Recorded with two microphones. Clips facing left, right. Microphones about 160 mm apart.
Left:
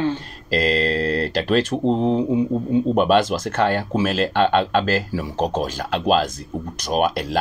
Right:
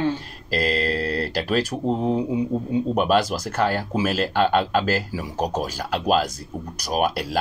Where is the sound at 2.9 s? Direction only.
5° right (ahead or behind).